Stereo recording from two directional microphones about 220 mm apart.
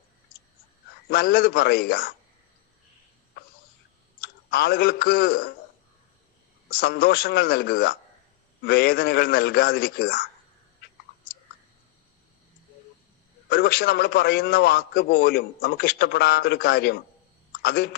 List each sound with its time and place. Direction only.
1.1 s a man's voice: 45° left (ahead or behind)
4.2 s speech: 45° left (ahead or behind)
6.7 s a man's voice: 45° left (ahead or behind)
13.5 s a man's voice: 45° left (ahead or behind)